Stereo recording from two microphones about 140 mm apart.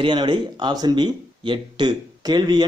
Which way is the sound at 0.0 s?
35° right (ahead or behind).